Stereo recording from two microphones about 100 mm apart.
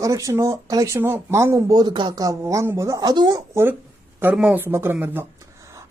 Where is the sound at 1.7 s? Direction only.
45° right (ahead or behind); by 3.0 s 30° right (ahead or behind).